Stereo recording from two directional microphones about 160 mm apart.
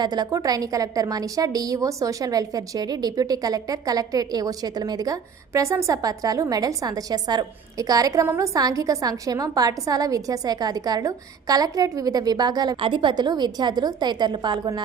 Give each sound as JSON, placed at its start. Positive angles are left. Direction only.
{"t": 0.0, "sound": "a woman's voice", "side_deg": -25}